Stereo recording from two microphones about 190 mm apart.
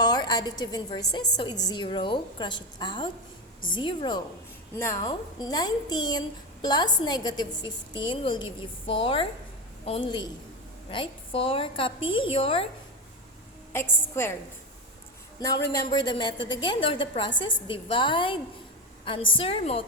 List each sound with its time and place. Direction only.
0.0 s a sound: 20° left (ahead or behind)
0.6 s a woman's voice: 20° left (ahead or behind)
13.7 s a woman's voice: 10° left (ahead or behind)
15.8 s a woman's voice: 20° left (ahead or behind)